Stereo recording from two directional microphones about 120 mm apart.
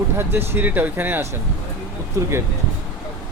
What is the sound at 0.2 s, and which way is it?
A man's voice, 20° right (ahead or behind).